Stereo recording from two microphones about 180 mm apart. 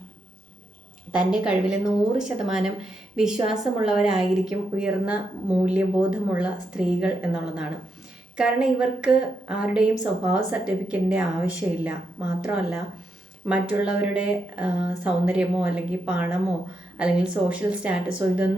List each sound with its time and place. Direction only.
1.1 s a woman's voice: 5° right (ahead or behind)